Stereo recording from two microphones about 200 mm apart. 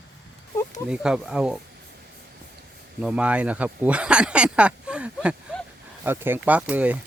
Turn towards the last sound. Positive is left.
turn(degrees=-10)  # may be behind; listen again after turning